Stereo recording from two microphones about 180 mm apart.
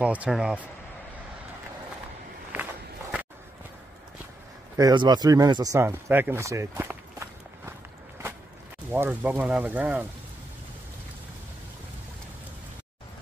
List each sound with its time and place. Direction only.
0.0 s speech: 5° right (ahead or behind)
2.5 s walk: 10° right (ahead or behind)
4.7 s speech: 20° right (ahead or behind)
8.9 s speech: 15° right (ahead or behind)